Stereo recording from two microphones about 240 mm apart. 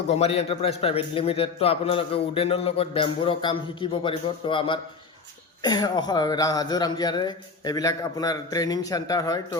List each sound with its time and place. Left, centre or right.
0.1 s a man's voice: left